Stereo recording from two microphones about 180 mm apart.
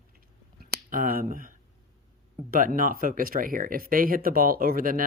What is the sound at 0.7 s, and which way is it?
Speech, 50° right (ahead or behind).